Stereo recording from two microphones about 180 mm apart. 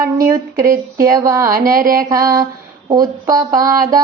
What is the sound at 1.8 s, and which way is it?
Mantra, 50° right (ahead or behind).